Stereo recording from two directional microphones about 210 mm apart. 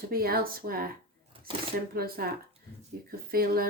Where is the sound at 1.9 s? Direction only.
45° right (ahead or behind).